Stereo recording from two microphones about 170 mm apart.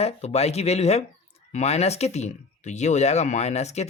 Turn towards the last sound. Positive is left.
turn(degrees=40)  # may be behind; listen again after turning